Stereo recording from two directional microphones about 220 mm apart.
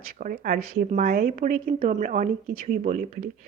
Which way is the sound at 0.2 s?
40° right (ahead or behind).